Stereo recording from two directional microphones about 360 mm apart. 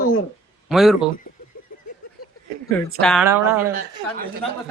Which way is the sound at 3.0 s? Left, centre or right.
Centre.